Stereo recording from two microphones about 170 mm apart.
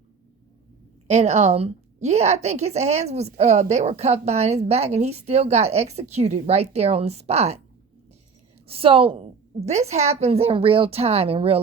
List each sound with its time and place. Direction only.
1.0 s a woman's voice: 40° right (ahead or behind)
8.6 s a woman's voice: 35° right (ahead or behind)